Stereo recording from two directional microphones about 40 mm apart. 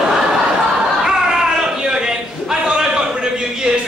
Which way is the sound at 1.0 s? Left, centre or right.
Centre.